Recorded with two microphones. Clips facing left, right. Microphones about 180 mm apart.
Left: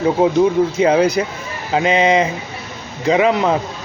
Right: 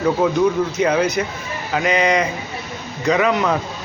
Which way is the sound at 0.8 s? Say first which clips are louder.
Left 4 dB; 30° left (ahead or behind).